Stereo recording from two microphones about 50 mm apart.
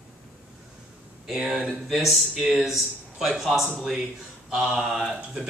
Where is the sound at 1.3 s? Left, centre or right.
Centre.